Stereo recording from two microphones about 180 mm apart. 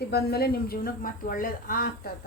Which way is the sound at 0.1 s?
60° left (ahead or behind).